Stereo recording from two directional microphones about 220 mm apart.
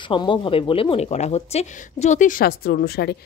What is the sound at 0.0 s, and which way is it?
A woman's voice, 20° left (ahead or behind).